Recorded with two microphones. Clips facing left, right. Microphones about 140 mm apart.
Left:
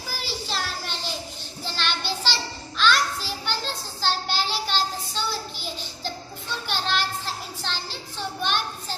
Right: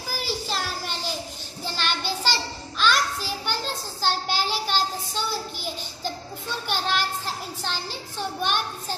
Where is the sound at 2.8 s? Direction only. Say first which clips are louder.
Left 1 dB; 45° right (ahead or behind).